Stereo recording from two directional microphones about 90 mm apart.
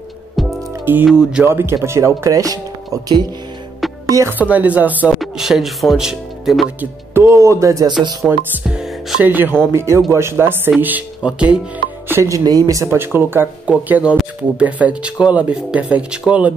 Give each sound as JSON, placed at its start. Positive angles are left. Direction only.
{"t": 0.4, "sound": "music", "side_deg": 0}
{"t": 1.0, "sound": "speech", "side_deg": -10}
{"t": 1.4, "sound": "speech", "side_deg": -25}
{"t": 4.0, "sound": "speech", "side_deg": -35}
{"t": 4.4, "sound": "speech", "side_deg": -15}
{"t": 5.2, "sound": "speech", "side_deg": -5}
{"t": 6.8, "sound": "speech", "side_deg": -30}
{"t": 8.3, "sound": "speech", "side_deg": -25}
{"t": 8.6, "sound": "music", "side_deg": -5}
{"t": 9.2, "sound": "speech", "side_deg": -20}
{"t": 9.7, "sound": "speech", "side_deg": -30}
{"t": 12.1, "sound": "speech", "side_deg": -35}